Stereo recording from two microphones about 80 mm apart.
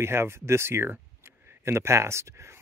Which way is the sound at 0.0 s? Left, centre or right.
Right.